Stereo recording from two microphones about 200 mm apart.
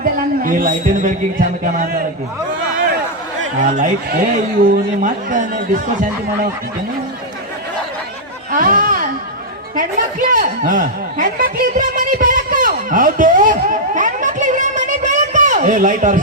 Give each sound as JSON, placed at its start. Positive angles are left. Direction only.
{"t": 0.0, "sound": "speech", "side_deg": -45}
{"t": 3.6, "sound": "speech", "side_deg": -40}
{"t": 8.5, "sound": "a sound", "side_deg": -45}
{"t": 9.7, "sound": "chuckle", "side_deg": -40}